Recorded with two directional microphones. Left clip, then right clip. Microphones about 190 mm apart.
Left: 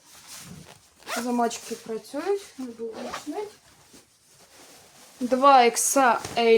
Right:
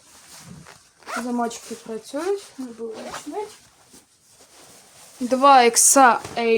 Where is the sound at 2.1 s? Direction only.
45° right (ahead or behind).